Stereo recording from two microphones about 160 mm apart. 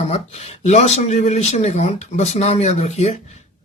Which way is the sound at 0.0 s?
40° left (ahead or behind).